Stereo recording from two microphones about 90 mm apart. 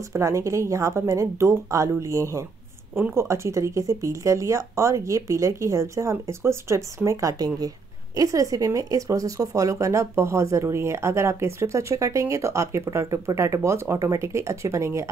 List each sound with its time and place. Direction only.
0.1 s speech: 35° right (ahead or behind)